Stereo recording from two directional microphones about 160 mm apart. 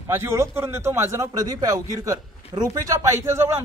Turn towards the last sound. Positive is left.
turn(degrees=-15)  # may be behind; listen again after turning